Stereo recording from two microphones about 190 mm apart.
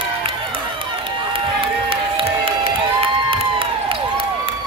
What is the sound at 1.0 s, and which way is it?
Crowd, 30° right (ahead or behind).